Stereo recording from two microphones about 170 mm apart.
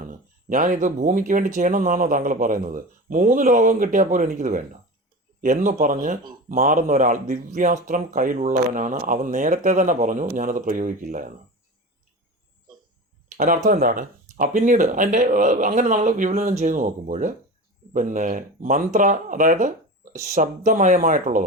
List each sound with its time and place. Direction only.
0.1 s speech: 50° right (ahead or behind)
13.2 s a sound: 50° right (ahead or behind)
13.7 s speech: 55° right (ahead or behind)